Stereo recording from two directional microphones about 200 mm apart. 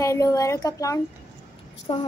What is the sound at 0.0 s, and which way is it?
Speech, 15° left (ahead or behind).